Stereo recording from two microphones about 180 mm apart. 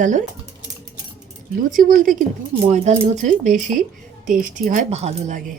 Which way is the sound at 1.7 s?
50° right (ahead or behind).